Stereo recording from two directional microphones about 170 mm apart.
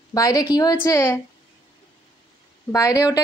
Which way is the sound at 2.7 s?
20° left (ahead or behind).